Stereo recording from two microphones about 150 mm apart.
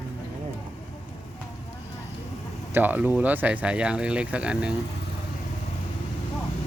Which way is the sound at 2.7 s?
10° right (ahead or behind).